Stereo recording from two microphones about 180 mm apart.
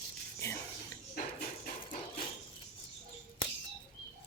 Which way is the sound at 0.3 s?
15° left (ahead or behind).